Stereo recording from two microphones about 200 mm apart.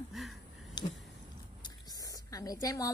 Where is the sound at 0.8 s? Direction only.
20° left (ahead or behind).